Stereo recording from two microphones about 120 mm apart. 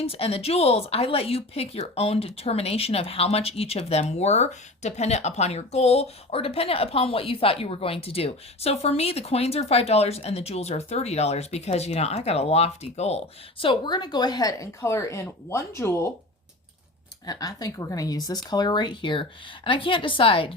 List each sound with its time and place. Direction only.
0.0 s speech: 55° left (ahead or behind); by 16.1 s 20° left (ahead or behind)
17.2 s speech: 30° left (ahead or behind); by 20.5 s 45° left (ahead or behind)